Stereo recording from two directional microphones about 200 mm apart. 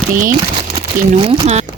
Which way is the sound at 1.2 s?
30° right (ahead or behind).